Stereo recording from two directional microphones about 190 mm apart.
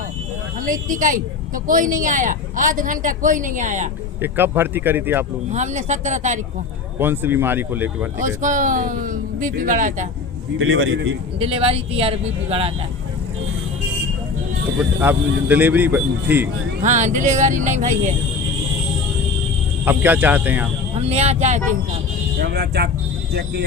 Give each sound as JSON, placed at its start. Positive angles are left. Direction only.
{"t": 0.6, "sound": "speech", "side_deg": -45}
{"t": 4.2, "sound": "speech", "side_deg": -10}
{"t": 5.5, "sound": "speech", "side_deg": -35}
{"t": 7.0, "sound": "speech", "side_deg": -10}
{"t": 8.4, "sound": "speech", "side_deg": -40}
{"t": 10.6, "sound": "a man's voice", "side_deg": -90}
{"t": 11.3, "sound": "speech", "side_deg": -30}
{"t": 14.8, "sound": "speech", "side_deg": -10}
{"t": 16.8, "sound": "speech", "side_deg": -40}
{"t": 19.8, "sound": "speech", "side_deg": -10}
{"t": 20.9, "sound": "speech", "side_deg": -35}
{"t": 22.4, "sound": "speech", "side_deg": -60}